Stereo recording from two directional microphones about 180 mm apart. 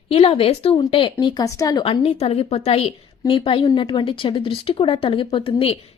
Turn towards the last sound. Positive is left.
turn(degrees=30)  # may be behind; listen again after turning